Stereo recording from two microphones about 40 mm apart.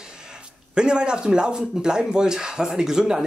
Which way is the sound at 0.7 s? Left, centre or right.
Right.